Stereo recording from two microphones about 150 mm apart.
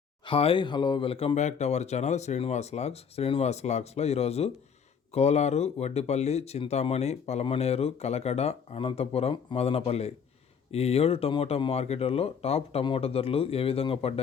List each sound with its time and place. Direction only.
0.3 s speech: 35° left (ahead or behind)